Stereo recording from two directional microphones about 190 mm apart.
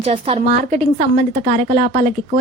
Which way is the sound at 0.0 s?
35° right (ahead or behind).